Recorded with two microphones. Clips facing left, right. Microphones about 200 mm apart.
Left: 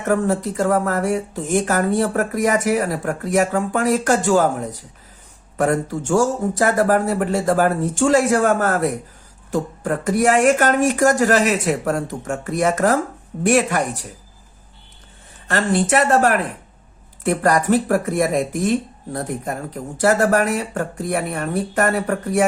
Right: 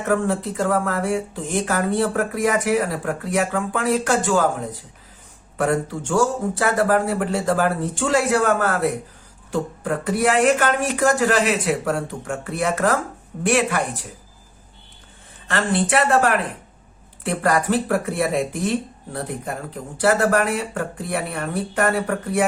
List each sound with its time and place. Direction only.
0.1 s speech: 40° left (ahead or behind)
15.4 s speech: 40° left (ahead or behind)
20.0 s speech: 45° left (ahead or behind)